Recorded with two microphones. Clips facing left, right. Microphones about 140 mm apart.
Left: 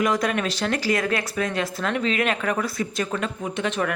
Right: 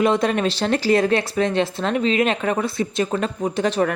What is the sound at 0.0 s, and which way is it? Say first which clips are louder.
Speech: right 4 dB; 30° right (ahead or behind).